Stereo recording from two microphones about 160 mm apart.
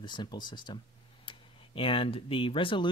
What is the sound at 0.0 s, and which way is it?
Speech, 30° left (ahead or behind).